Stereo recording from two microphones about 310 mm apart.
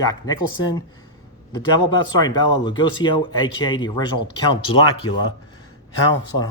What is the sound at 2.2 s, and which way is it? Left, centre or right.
Speech, centre.